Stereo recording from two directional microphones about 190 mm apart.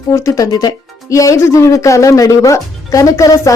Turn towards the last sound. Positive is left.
turn(degrees=15)  # may be behind; listen again after turning